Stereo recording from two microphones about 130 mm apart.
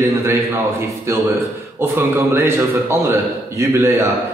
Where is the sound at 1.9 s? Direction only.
20° right (ahead or behind).